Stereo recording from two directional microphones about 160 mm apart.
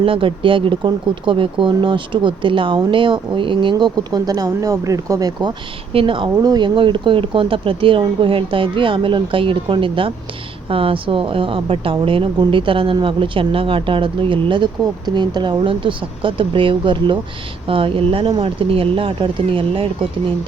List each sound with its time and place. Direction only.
0.0 s speech: 35° right (ahead or behind)